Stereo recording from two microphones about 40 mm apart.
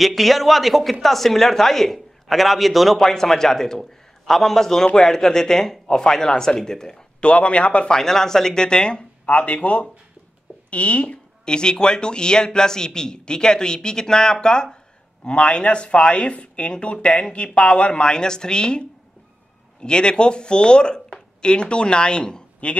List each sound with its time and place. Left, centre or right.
0.0 s speech: centre
3.0 s speech: centre
7.2 s speech: left
7.9 s speech: centre; by 11.1 s left
11.4 s speech: left